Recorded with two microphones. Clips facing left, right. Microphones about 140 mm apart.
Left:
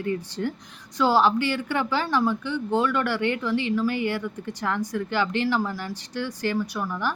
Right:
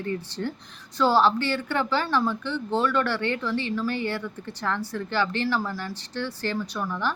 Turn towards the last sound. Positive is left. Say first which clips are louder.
# even
turn(degrees=10)  # may be behind; listen again after turning